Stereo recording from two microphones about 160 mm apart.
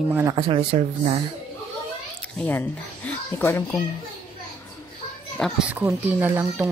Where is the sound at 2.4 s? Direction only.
10° left (ahead or behind).